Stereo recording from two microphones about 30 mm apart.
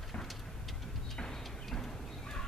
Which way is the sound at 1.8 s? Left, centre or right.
Centre.